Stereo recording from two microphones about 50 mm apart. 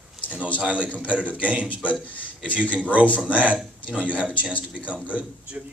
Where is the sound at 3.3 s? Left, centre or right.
Right.